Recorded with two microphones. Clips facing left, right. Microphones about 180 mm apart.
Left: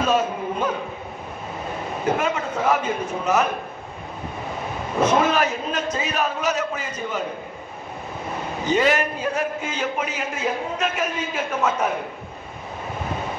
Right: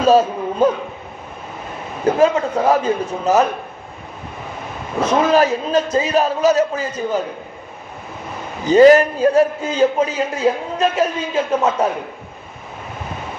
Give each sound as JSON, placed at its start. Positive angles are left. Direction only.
{"t": 0.0, "sound": "speech", "side_deg": -35}
{"t": 2.1, "sound": "a man's voice", "side_deg": -35}
{"t": 5.3, "sound": "a man's voice", "side_deg": -35}
{"t": 8.6, "sound": "a man's voice", "side_deg": -35}